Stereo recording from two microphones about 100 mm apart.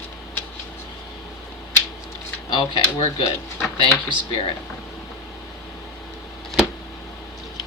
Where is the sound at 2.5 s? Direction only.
50° left (ahead or behind).